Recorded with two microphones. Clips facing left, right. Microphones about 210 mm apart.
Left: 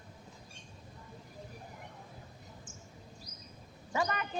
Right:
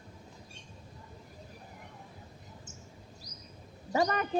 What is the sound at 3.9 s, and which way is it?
Speech, 40° right (ahead or behind).